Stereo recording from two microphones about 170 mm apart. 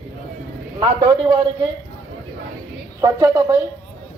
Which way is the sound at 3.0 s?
20° right (ahead or behind).